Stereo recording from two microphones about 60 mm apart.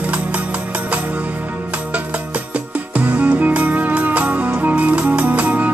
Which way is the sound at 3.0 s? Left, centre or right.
Right.